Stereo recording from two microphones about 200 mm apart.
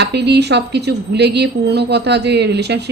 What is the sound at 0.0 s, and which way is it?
A woman's voice, 55° right (ahead or behind).